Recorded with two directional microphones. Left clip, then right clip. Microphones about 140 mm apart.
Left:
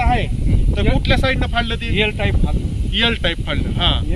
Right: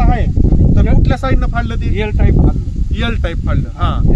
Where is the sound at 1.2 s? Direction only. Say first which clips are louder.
Even; 5° right (ahead or behind).